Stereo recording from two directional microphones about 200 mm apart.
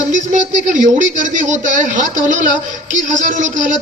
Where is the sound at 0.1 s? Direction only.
40° right (ahead or behind).